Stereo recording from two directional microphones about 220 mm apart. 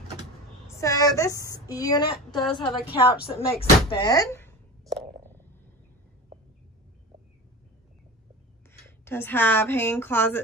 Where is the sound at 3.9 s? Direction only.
20° left (ahead or behind).